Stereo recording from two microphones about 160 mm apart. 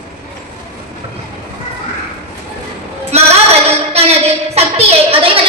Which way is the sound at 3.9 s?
40° right (ahead or behind).